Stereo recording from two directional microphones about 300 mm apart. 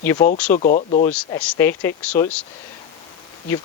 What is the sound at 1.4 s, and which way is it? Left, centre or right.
Speech, centre.